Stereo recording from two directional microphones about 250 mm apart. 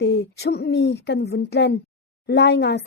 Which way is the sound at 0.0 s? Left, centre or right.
Left.